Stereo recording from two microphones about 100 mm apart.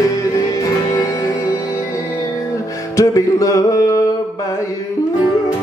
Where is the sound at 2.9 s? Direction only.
35° left (ahead or behind).